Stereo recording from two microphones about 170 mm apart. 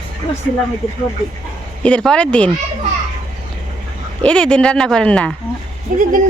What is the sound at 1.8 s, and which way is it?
Speech, 5° left (ahead or behind).